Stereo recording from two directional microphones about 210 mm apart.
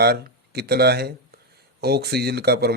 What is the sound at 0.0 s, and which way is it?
Speech, 50° right (ahead or behind).